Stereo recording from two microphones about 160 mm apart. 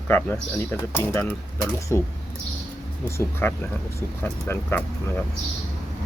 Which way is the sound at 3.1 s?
15° left (ahead or behind).